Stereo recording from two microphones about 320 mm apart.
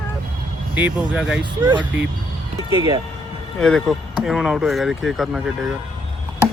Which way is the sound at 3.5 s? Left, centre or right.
Centre.